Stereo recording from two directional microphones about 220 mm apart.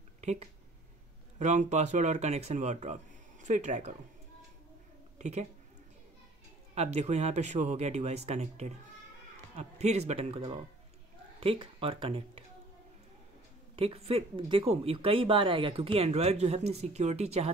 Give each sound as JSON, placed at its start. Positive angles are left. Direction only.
{"t": 0.2, "sound": "speech", "side_deg": -30}
{"t": 5.2, "sound": "a woman's voice", "side_deg": -30}
{"t": 6.7, "sound": "speech", "side_deg": -30}
{"t": 13.7, "sound": "speech", "side_deg": -25}